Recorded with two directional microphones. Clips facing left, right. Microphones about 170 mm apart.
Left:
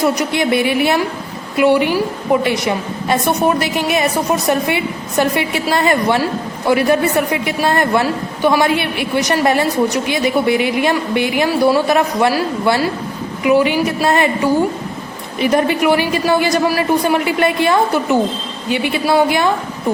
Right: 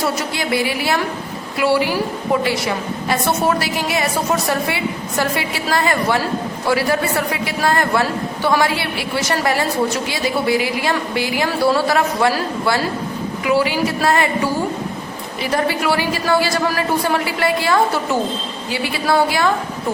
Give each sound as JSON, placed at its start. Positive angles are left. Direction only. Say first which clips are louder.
{"t": 0.0, "sound": "a woman's voice", "louder": "left 6 dB", "side_deg": 15}
{"t": 15.4, "sound": "a woman's voice", "louder": "left 5 dB", "side_deg": 20}